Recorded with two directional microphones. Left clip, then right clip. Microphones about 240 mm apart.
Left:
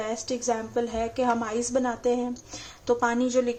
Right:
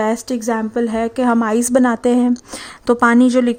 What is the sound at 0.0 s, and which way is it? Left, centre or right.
A woman's voice, right.